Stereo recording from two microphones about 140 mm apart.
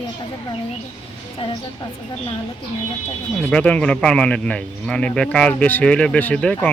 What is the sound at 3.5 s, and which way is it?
Speech, 10° left (ahead or behind).